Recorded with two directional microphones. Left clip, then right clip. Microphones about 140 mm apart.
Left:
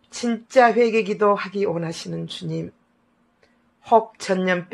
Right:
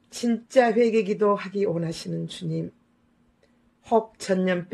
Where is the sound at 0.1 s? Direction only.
30° right (ahead or behind).